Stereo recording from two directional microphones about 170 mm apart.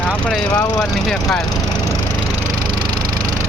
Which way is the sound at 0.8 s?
5° left (ahead or behind).